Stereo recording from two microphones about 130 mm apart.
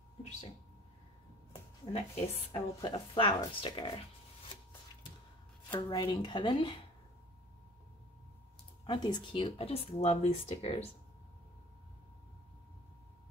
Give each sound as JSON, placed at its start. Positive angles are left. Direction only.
{"t": 2.0, "sound": "speech", "side_deg": 50}
{"t": 2.5, "sound": "speech", "side_deg": 35}
{"t": 5.6, "sound": "speech", "side_deg": 35}
{"t": 8.8, "sound": "speech", "side_deg": 35}